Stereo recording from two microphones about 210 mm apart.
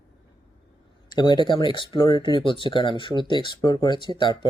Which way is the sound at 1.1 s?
20° left (ahead or behind).